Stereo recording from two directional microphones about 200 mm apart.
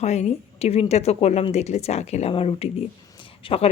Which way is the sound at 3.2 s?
25° left (ahead or behind).